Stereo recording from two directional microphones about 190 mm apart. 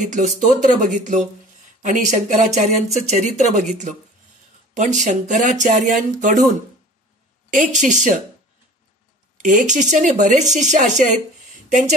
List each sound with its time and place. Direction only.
0.0 s speech: 40° right (ahead or behind)
7.5 s speech: 40° right (ahead or behind)
9.4 s speech: 40° right (ahead or behind)